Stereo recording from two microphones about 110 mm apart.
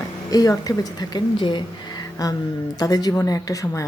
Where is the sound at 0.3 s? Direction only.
35° left (ahead or behind).